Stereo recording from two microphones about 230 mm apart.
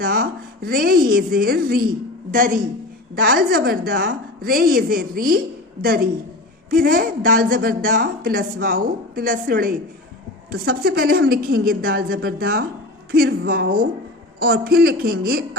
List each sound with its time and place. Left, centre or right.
0.0 s a woman's voice: right
6.7 s a woman's voice: right